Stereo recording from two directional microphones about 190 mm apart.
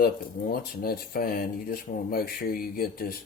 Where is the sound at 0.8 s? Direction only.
50° left (ahead or behind).